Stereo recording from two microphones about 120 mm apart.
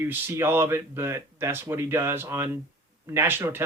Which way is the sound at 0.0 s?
20° right (ahead or behind).